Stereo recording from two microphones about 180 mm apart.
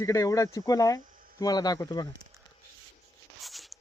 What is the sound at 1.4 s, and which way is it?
Speech, 20° left (ahead or behind).